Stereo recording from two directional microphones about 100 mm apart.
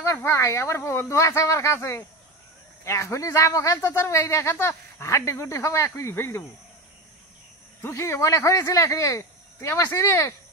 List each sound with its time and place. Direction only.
0.0 s a man's voice: 25° left (ahead or behind)
7.8 s a man's voice: 25° left (ahead or behind)